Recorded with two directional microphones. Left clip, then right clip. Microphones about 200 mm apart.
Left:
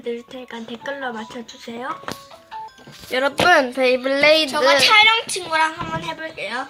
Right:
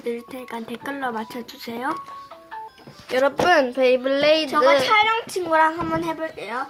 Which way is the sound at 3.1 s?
5° right (ahead or behind).